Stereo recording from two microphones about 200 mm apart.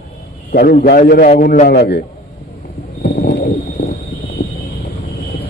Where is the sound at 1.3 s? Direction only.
40° left (ahead or behind); by 2.0 s 55° left (ahead or behind).